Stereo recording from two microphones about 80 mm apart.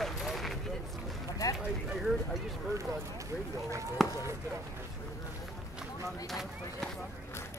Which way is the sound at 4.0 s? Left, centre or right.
Centre.